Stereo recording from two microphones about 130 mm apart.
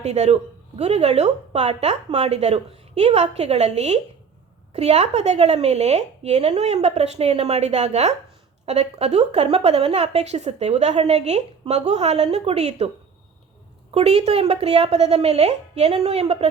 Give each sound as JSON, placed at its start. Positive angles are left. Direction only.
{"t": 0.0, "sound": "a woman's voice", "side_deg": -55}
{"t": 13.9, "sound": "a woman's voice", "side_deg": -55}